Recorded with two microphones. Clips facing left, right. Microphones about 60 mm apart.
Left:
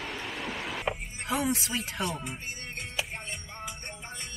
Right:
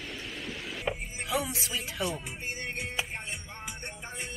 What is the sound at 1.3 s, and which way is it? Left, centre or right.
Speech, left.